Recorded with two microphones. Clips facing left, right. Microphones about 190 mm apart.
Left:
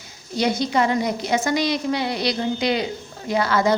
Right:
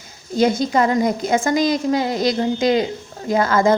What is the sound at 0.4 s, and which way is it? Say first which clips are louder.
A woman's voice: right 3 dB; 45° right (ahead or behind).